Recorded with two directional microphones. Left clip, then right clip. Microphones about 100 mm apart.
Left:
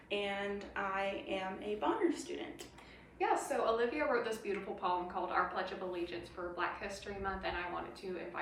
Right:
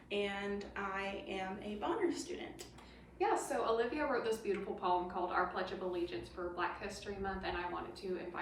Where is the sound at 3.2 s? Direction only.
10° right (ahead or behind).